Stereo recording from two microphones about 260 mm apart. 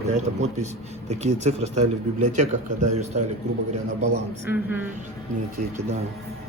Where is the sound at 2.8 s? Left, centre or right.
Right.